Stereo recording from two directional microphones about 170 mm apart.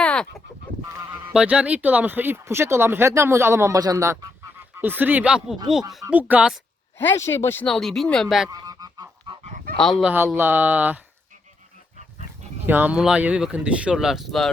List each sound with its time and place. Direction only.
0.0 s goose: 5° left (ahead or behind)
1.3 s speech: 5° right (ahead or behind)
7.0 s speech: 15° left (ahead or behind)
7.7 s speech: centre (ahead or behind)
8.4 s goose: 20° right (ahead or behind)
10.0 s speech: 5° right (ahead or behind)
12.6 s speech: 10° right (ahead or behind)